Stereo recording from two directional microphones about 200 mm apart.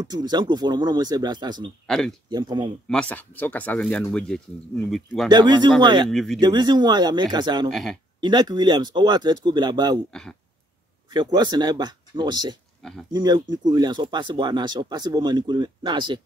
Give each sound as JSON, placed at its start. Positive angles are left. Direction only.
{"t": 0.0, "sound": "speech", "side_deg": -20}
{"t": 1.9, "sound": "speech", "side_deg": 0}
{"t": 2.2, "sound": "speech", "side_deg": -20}
{"t": 2.9, "sound": "speech", "side_deg": 5}
{"t": 5.3, "sound": "speech", "side_deg": -20}
{"t": 6.0, "sound": "speech", "side_deg": 0}
{"t": 6.4, "sound": "speech", "side_deg": -20}
{"t": 7.7, "sound": "speech", "side_deg": 0}
{"t": 8.2, "sound": "speech", "side_deg": -20}
{"t": 11.1, "sound": "speech", "side_deg": -20}